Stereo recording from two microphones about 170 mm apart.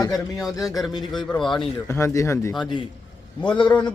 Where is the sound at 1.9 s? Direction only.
15° left (ahead or behind).